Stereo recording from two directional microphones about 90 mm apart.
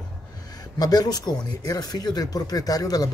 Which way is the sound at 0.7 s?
45° left (ahead or behind).